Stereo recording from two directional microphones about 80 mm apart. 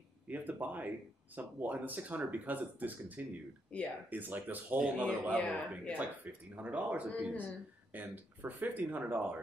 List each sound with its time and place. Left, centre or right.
0.3 s a man's voice: right
5.3 s speech: centre
5.9 s speech: centre